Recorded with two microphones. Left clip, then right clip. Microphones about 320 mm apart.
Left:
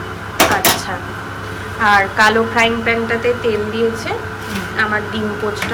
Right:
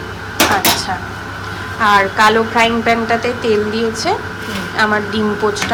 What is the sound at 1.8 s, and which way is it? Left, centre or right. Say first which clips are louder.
A woman's voice: right 1 dB; centre.